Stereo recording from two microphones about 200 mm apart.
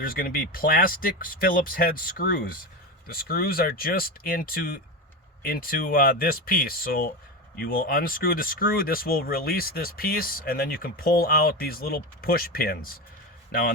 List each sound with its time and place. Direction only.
0.0 s speech: 45° left (ahead or behind)